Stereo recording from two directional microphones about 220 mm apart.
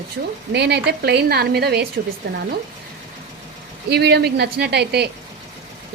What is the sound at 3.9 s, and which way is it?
A woman's voice, 50° right (ahead or behind).